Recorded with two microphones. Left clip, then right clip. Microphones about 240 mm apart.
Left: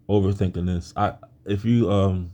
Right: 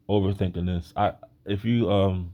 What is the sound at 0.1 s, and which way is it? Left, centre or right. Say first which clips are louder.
Speech: left 3 dB; right.